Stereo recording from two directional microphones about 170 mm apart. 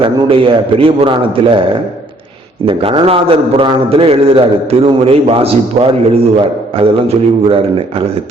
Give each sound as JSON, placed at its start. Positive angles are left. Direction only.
{"t": 0.0, "sound": "a man's voice", "side_deg": -30}
{"t": 2.6, "sound": "a man's voice", "side_deg": -30}